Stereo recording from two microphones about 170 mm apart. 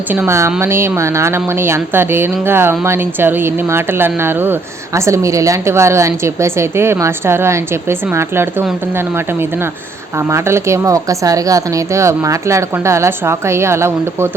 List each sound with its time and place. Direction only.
0.1 s a woman's voice: 15° right (ahead or behind)